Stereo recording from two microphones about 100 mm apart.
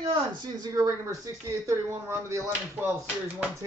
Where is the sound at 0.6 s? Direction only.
35° right (ahead or behind).